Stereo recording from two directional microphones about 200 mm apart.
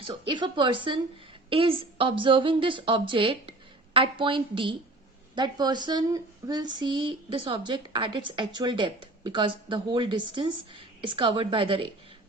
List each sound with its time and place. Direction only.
0.0 s speech: 25° right (ahead or behind)